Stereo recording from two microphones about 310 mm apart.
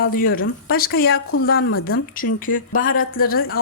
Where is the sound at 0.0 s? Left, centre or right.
Left.